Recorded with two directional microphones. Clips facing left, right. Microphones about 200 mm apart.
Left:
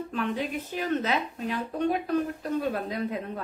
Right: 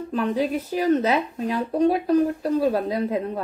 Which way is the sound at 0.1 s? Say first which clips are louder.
Right 8 dB; 35° right (ahead or behind).